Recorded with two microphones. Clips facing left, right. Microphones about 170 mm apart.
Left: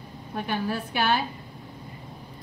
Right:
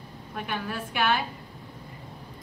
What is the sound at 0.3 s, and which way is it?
Speech, 35° left (ahead or behind).